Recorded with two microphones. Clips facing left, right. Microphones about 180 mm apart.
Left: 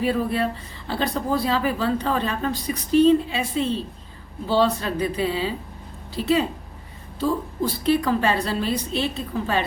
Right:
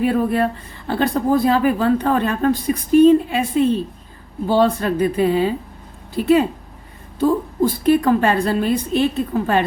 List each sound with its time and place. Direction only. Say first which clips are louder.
0.0 s a woman's voice: right 5 dB; 50° right (ahead or behind)